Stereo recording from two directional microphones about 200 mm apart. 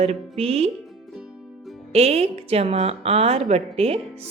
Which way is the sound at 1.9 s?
30° right (ahead or behind).